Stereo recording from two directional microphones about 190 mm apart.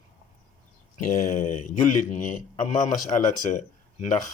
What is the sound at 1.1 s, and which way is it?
Speech, 40° left (ahead or behind).